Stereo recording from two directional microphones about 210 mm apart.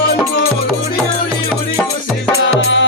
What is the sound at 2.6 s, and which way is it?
Music, 60° left (ahead or behind).